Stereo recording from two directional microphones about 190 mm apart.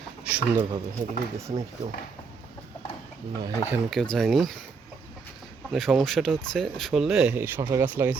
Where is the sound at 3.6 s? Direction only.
Centre (ahead or behind).